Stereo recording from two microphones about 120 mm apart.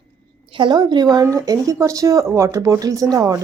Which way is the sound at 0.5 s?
40° right (ahead or behind).